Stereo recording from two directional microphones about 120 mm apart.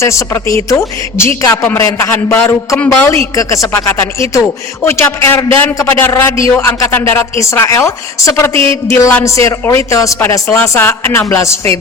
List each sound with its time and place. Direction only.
0.0 s a woman's voice: 25° left (ahead or behind)
3.1 s speech: 25° left (ahead or behind)